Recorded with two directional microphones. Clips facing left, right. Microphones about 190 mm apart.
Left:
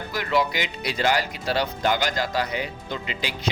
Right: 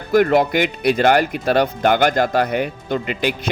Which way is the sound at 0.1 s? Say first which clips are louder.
Right 10 dB; 55° right (ahead or behind).